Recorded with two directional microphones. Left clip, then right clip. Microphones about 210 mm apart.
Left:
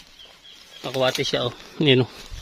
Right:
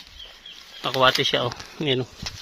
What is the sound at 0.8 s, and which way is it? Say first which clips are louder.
Speech: right 4 dB; 5° left (ahead or behind).